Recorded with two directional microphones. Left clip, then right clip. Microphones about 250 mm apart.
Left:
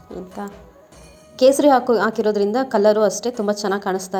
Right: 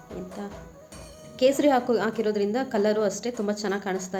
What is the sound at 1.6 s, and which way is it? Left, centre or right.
A woman's voice, centre.